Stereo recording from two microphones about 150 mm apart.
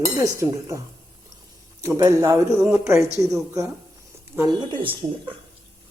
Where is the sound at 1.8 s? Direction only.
20° right (ahead or behind).